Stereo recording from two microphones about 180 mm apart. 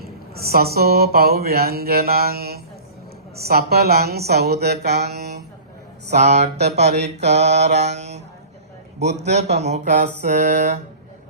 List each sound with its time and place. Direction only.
0.0 s speech: 60° right (ahead or behind)
6.1 s mantra: 35° right (ahead or behind)
9.0 s a man's voice: 40° right (ahead or behind)
9.3 s mantra: 35° right (ahead or behind)